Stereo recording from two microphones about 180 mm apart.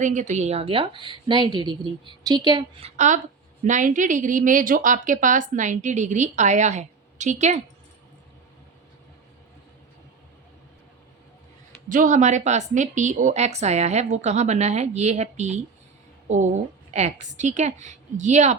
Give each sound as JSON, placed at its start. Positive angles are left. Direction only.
{"t": 0.0, "sound": "a woman's voice", "side_deg": -45}
{"t": 3.6, "sound": "a woman's voice", "side_deg": -45}
{"t": 11.9, "sound": "speech", "side_deg": -45}
{"t": 16.9, "sound": "speech", "side_deg": -40}